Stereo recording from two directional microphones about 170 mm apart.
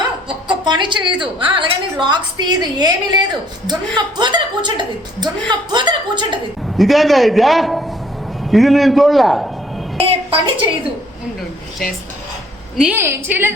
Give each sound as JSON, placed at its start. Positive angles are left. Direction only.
{"t": 0.3, "sound": "a woman's voice", "side_deg": -30}
{"t": 6.7, "sound": "a man's voice", "side_deg": 0}
{"t": 10.0, "sound": "a woman's voice", "side_deg": -30}
{"t": 12.7, "sound": "a woman's voice", "side_deg": -5}